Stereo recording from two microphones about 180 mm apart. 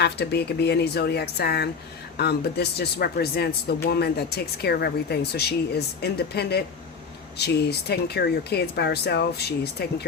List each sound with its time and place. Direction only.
0.0 s speech: 65° left (ahead or behind)